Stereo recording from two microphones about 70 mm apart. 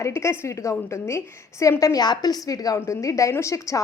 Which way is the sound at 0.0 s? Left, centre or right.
Left.